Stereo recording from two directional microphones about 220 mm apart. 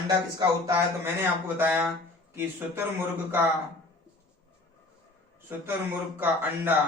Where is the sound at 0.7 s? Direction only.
10° right (ahead or behind).